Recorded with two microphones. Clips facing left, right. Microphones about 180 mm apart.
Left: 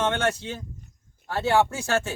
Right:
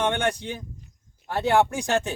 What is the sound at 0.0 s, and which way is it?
Speech, 15° right (ahead or behind).